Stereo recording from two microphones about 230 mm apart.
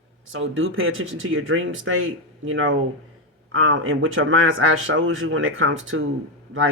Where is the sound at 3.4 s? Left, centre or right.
Right.